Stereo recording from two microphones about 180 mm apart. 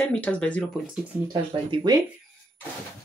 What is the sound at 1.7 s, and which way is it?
Speech, 20° right (ahead or behind).